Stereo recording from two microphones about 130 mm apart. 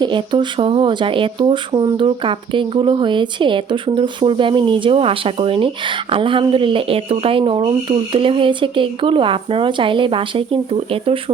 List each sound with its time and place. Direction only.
0.0 s speech: 35° right (ahead or behind)